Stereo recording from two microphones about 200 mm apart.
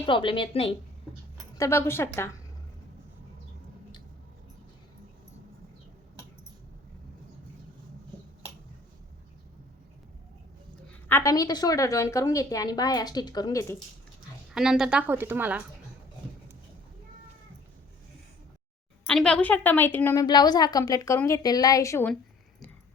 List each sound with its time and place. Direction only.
0.0 s speech: 25° left (ahead or behind)
1.5 s a woman's voice: 15° left (ahead or behind)
11.1 s a woman's voice: 15° left (ahead or behind)
14.5 s a woman's voice: 5° right (ahead or behind)
19.0 s a woman's voice: 5° left (ahead or behind)